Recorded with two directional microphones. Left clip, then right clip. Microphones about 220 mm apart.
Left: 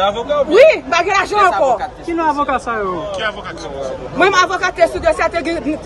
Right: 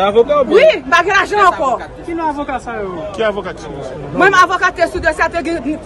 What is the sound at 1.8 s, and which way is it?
Speech, 45° left (ahead or behind).